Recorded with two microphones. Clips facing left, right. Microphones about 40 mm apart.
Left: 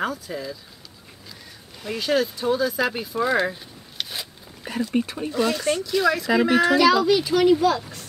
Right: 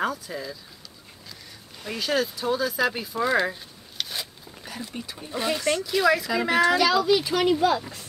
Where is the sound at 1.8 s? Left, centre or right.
Centre.